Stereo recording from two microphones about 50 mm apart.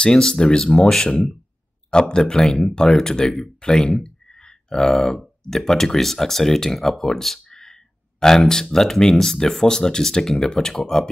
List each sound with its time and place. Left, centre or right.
0.0 s speech: centre